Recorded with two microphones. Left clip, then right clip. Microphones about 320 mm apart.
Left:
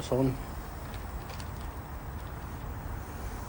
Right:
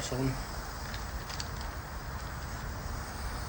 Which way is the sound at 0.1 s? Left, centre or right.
Centre.